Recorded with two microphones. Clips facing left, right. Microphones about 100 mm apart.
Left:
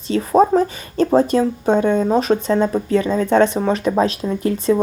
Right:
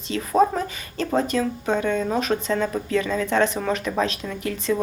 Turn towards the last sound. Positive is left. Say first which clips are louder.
# left 7 dB
turn(degrees=30)  # may be behind; listen again after turning